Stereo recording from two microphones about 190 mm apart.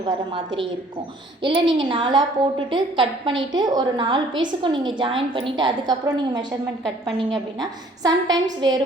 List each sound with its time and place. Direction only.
0.0 s a woman's voice: 25° right (ahead or behind)